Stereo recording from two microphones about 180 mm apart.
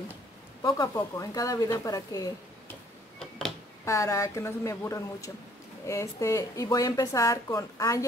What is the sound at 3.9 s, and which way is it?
A woman's voice, 15° left (ahead or behind).